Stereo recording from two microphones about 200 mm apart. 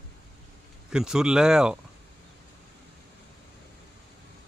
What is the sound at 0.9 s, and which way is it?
Speech, 5° right (ahead or behind).